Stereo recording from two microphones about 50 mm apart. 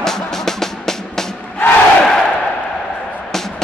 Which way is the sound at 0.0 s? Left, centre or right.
Centre.